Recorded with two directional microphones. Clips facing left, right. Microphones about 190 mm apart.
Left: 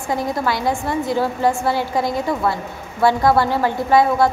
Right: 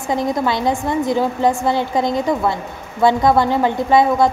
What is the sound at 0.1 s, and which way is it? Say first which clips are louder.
A woman's voice: right 3 dB; 20° right (ahead or behind).